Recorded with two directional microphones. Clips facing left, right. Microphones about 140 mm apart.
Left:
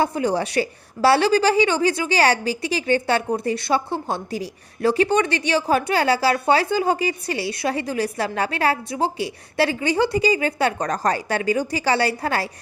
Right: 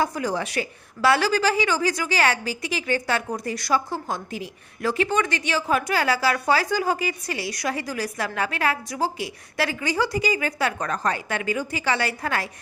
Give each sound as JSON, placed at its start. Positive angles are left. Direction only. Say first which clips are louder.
{"t": 0.0, "sound": "a woman's voice", "louder": "left 4 dB", "side_deg": 30}